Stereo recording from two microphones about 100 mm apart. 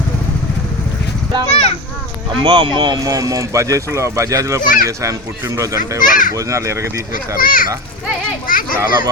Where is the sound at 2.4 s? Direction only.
50° right (ahead or behind); by 6.8 s 30° right (ahead or behind).